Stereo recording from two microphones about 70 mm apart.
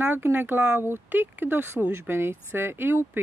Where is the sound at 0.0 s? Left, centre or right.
Right.